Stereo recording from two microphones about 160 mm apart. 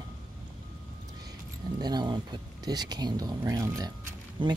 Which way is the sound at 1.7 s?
25° right (ahead or behind).